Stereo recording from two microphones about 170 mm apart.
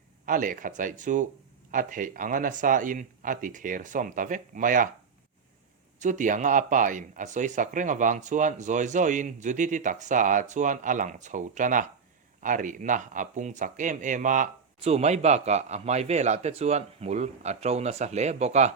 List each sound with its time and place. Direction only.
0.3 s speech: 50° right (ahead or behind)
6.0 s speech: 45° right (ahead or behind)